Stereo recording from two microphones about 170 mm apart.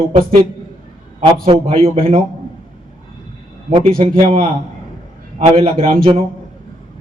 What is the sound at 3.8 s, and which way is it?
Speech, 50° right (ahead or behind).